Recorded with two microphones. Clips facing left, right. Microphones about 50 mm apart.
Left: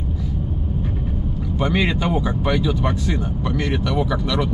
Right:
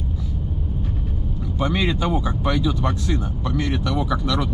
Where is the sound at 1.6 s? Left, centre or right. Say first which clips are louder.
Left 2 dB; left.